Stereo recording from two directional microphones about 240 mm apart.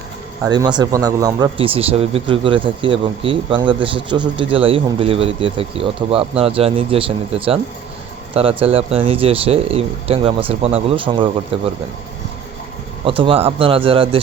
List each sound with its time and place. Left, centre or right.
0.4 s speech: centre
13.1 s speech: right